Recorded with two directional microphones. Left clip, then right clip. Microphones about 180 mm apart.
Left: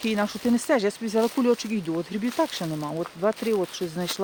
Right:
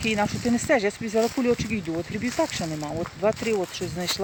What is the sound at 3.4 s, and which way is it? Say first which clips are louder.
Speech: even; 25° left (ahead or behind).